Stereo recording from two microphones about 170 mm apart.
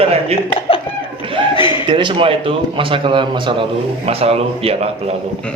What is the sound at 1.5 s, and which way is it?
Chuckle, 30° left (ahead or behind).